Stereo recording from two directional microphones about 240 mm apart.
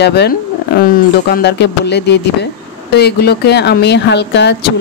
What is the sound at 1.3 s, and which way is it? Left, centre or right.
Speech, left.